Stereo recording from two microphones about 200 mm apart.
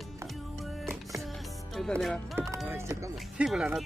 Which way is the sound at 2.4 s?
10° right (ahead or behind).